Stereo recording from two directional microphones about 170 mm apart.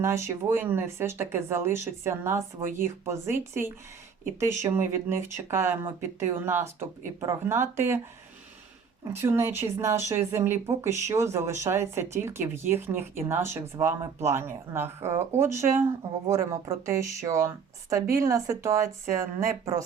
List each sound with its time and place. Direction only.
0.0 s speech: 15° right (ahead or behind)
9.0 s speech: 15° right (ahead or behind)